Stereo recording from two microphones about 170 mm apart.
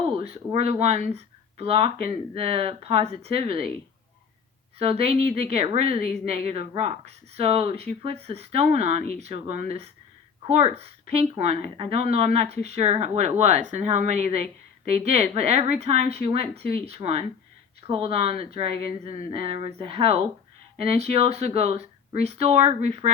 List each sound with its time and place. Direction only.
0.0 s speech: 30° right (ahead or behind)
4.8 s speech: 35° right (ahead or behind)